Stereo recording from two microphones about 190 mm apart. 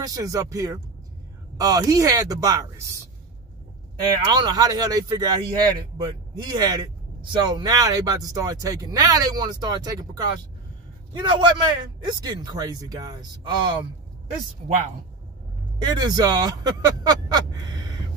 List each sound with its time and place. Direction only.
0.0 s a man's voice: 20° right (ahead or behind)
4.2 s a man's voice: 20° right (ahead or behind)
15.8 s a man's voice: 20° right (ahead or behind)